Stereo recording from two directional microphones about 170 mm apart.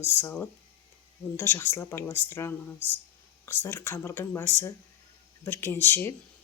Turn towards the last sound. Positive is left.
turn(degrees=10)  # may be behind; listen again after turning